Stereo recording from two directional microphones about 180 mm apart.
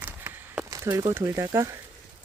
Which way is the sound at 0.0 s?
10° right (ahead or behind).